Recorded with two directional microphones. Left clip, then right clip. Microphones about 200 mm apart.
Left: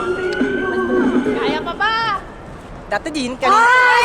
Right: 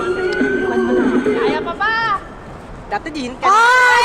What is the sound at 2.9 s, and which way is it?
Speech, 55° left (ahead or behind).